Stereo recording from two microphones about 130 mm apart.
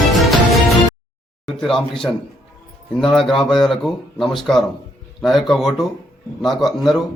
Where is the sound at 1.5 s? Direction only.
5° left (ahead or behind).